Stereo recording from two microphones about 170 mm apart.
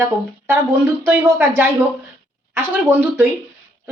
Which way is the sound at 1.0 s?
15° right (ahead or behind).